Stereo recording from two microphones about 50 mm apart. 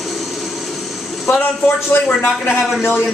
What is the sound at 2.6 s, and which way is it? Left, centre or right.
Speech, centre.